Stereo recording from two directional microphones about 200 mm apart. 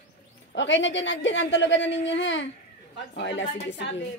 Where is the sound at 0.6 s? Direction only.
65° left (ahead or behind).